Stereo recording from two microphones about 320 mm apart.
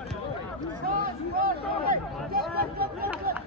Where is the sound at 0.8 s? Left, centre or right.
Right.